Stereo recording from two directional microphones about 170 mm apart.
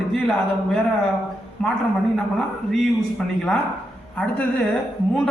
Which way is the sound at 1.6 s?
5° left (ahead or behind).